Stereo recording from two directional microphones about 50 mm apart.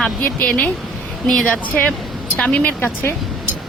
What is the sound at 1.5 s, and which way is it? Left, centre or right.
Speech, left.